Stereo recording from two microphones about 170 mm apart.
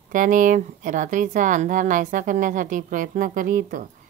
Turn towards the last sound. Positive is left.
turn(degrees=-50)  # may be behind; listen again after turning